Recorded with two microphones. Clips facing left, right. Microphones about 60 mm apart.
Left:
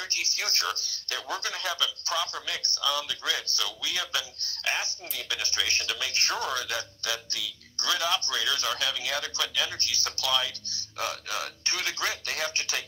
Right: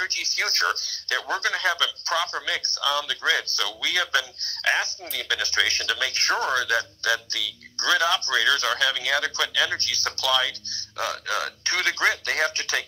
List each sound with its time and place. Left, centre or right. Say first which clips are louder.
0.0 s speech: right 6 dB; right